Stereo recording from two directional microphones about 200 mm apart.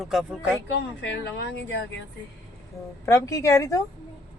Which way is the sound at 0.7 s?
60° left (ahead or behind).